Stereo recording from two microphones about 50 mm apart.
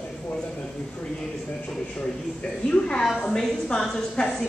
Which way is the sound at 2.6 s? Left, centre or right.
Left.